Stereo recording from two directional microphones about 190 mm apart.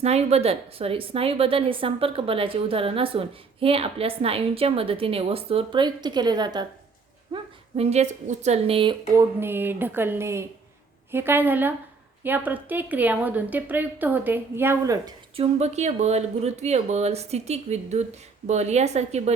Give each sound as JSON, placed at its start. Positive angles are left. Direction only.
{"t": 0.0, "sound": "a woman's voice", "side_deg": -35}
{"t": 7.3, "sound": "speech", "side_deg": -35}
{"t": 9.1, "sound": "speech", "side_deg": -10}
{"t": 15.4, "sound": "speech", "side_deg": -35}